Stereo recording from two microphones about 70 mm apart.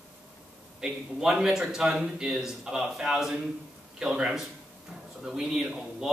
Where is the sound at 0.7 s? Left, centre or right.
Centre.